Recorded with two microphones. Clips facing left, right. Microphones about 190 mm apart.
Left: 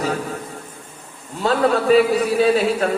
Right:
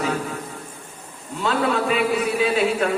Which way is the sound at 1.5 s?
40° left (ahead or behind).